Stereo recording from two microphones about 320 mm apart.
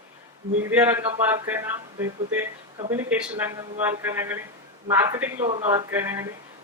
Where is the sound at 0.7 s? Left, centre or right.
Centre.